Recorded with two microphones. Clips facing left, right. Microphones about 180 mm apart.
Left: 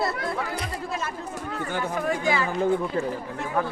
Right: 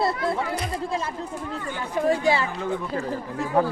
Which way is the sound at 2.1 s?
30° right (ahead or behind).